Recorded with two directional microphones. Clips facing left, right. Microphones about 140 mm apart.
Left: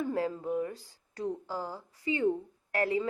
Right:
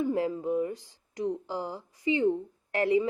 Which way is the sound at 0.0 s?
20° right (ahead or behind).